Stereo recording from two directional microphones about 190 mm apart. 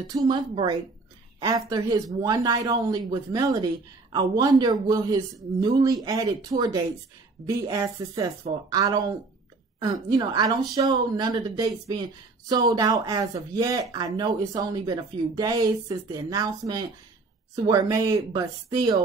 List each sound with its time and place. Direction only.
0.1 s speech: 25° right (ahead or behind)